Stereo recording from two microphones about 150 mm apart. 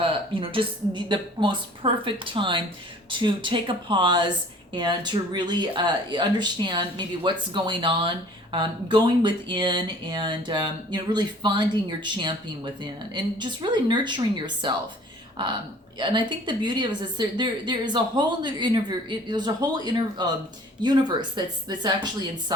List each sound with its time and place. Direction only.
0.0 s speech: 35° right (ahead or behind)
16.0 s a woman's voice: 30° right (ahead or behind)